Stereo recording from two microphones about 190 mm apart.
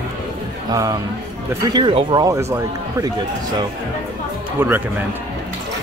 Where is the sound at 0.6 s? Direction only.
20° right (ahead or behind).